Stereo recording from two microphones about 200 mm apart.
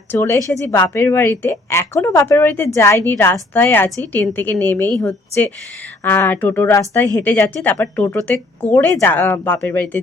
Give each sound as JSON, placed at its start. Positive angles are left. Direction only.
{"t": 0.1, "sound": "speech", "side_deg": 15}